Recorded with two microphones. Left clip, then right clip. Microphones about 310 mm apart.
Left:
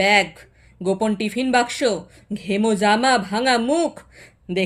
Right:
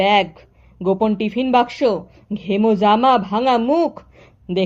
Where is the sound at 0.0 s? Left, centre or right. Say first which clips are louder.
Right 1 dB; centre.